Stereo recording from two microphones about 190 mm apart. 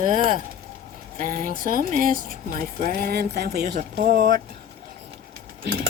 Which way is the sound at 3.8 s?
45° right (ahead or behind).